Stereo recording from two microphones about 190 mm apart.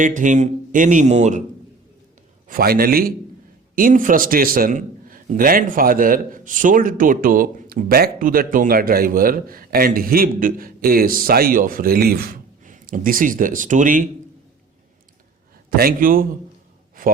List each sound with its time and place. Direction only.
0.0 s speech: 45° right (ahead or behind)
2.5 s a man's voice: 50° right (ahead or behind)
15.7 s a man's voice: 50° right (ahead or behind)